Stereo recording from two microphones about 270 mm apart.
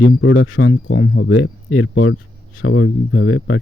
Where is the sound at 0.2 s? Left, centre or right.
Left.